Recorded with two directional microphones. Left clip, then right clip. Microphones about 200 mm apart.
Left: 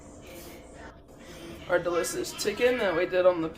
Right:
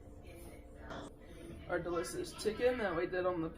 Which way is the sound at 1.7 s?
25° left (ahead or behind).